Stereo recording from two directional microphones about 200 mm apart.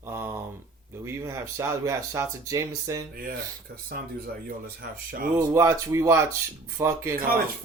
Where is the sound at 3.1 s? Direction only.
45° right (ahead or behind).